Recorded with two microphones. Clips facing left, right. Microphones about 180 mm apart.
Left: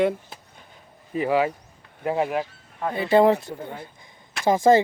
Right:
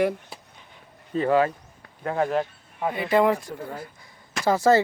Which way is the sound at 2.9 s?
30° left (ahead or behind).